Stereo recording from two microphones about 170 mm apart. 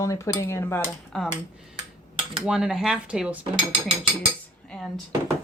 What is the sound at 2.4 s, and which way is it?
Cutlery, 5° right (ahead or behind).